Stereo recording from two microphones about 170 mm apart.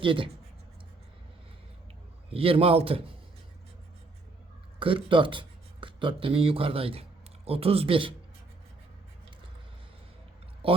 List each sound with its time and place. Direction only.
0.0 s speech: 30° right (ahead or behind)
2.3 s speech: 35° right (ahead or behind)
4.8 s speech: 30° right (ahead or behind)
10.6 s speech: 35° right (ahead or behind)